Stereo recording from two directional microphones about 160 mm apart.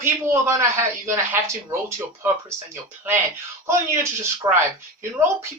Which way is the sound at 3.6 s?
15° right (ahead or behind).